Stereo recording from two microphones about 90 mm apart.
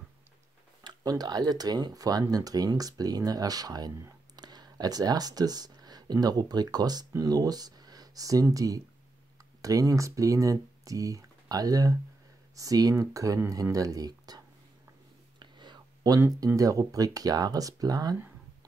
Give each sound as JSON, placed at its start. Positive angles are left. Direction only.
{"t": 0.8, "sound": "speech", "side_deg": -50}
{"t": 15.3, "sound": "whispering", "side_deg": -55}
{"t": 16.2, "sound": "speech", "side_deg": -35}